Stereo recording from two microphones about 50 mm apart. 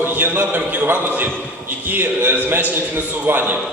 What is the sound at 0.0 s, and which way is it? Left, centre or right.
A man's voice, right.